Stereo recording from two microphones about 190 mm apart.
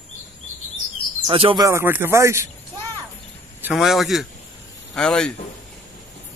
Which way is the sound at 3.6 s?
Centre (ahead or behind).